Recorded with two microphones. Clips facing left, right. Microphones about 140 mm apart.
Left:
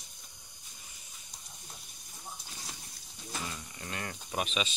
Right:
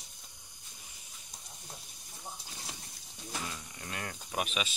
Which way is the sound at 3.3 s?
Centre (ahead or behind).